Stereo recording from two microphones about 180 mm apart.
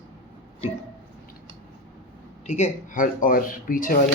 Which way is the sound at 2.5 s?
45° left (ahead or behind).